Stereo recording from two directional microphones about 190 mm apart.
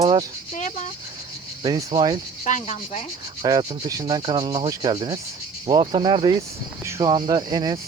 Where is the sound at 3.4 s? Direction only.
20° right (ahead or behind).